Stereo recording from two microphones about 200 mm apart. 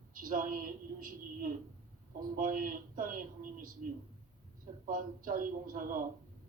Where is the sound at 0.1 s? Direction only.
45° right (ahead or behind).